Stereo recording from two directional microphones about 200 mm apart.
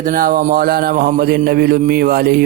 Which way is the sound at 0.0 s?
45° right (ahead or behind).